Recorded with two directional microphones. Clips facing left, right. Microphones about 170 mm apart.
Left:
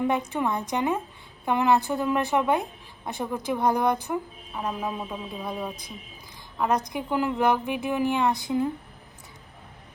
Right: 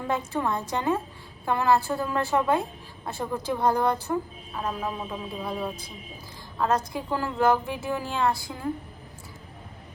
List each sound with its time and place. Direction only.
0.3 s a woman's voice: 15° left (ahead or behind)